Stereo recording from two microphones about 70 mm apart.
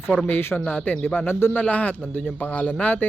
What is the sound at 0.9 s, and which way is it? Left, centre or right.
A man's voice, left.